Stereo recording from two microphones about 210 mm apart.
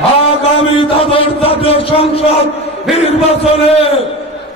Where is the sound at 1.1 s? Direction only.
25° left (ahead or behind).